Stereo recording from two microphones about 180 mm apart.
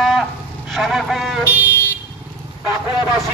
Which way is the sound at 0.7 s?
Centre (ahead or behind).